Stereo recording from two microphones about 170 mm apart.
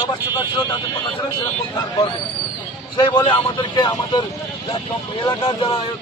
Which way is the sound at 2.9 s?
25° left (ahead or behind).